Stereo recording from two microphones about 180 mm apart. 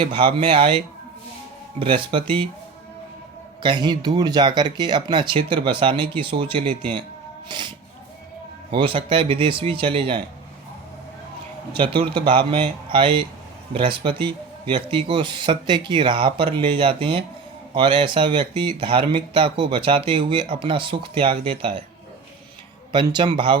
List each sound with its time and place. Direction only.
0.0 s speech: 25° right (ahead or behind)
1.8 s speech: 30° right (ahead or behind)
3.6 s speech: 25° right (ahead or behind)
8.7 s speech: 30° right (ahead or behind)
11.7 s speech: 30° right (ahead or behind)
22.9 s speech: 25° right (ahead or behind)